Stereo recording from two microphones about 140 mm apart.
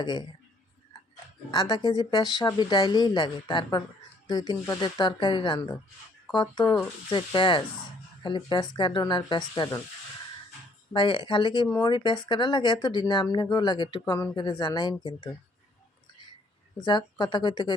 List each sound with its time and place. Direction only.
0.0 s speech: 30° left (ahead or behind)
1.5 s speech: 30° left (ahead or behind)
10.9 s speech: 35° left (ahead or behind)
16.8 s speech: 30° left (ahead or behind)